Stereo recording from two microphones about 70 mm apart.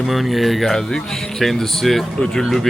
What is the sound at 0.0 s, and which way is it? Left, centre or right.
Speech, centre.